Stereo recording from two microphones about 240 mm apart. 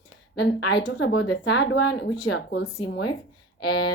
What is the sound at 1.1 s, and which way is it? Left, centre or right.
Speech, left.